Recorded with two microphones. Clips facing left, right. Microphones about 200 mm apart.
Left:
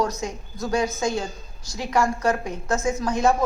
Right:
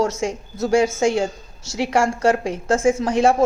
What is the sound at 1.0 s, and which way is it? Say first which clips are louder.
A woman's voice: right 7 dB; 85° right.